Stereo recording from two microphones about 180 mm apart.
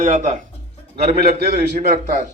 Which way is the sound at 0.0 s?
40° right (ahead or behind).